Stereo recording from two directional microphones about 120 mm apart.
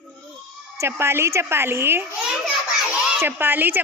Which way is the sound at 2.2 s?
5° right (ahead or behind).